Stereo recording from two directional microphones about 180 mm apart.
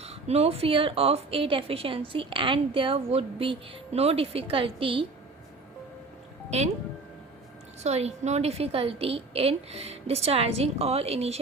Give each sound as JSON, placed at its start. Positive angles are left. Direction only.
{"t": 0.0, "sound": "a woman's voice", "side_deg": -35}
{"t": 7.8, "sound": "a woman's voice", "side_deg": -35}